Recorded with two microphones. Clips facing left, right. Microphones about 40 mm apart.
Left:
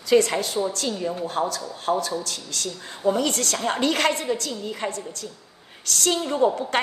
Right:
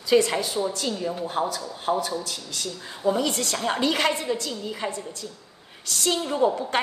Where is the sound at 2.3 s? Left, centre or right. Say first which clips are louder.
Left 1 dB; left.